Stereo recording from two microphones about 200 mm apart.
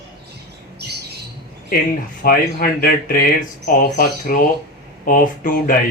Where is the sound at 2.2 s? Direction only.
45° left (ahead or behind).